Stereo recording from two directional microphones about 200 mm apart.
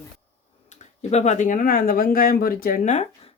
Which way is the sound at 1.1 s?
35° left (ahead or behind).